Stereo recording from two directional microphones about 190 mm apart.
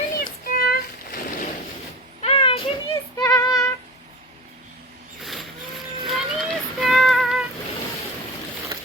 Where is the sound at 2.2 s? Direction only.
30° left (ahead or behind).